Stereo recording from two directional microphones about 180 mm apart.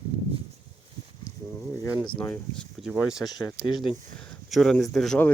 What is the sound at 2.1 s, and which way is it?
Speech, 5° left (ahead or behind).